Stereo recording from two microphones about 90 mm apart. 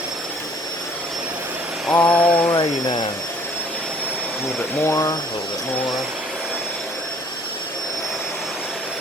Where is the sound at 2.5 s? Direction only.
50° left (ahead or behind).